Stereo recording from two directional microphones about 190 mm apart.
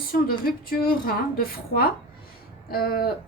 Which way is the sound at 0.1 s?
50° left (ahead or behind).